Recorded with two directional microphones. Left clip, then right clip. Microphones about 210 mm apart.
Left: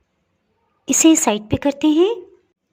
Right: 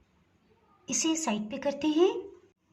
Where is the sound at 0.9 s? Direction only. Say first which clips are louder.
Left 16 dB; 55° left (ahead or behind).